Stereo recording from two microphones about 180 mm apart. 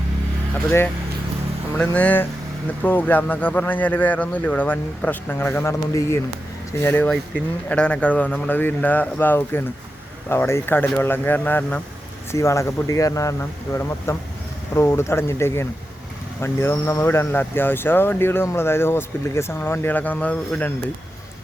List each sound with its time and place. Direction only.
1.8 s speech: 10° left (ahead or behind)